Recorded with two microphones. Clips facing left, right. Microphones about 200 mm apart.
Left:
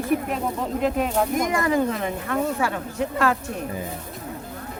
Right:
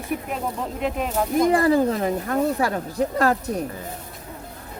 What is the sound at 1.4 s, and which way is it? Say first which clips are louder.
Speech: right 8 dB; 30° right (ahead or behind).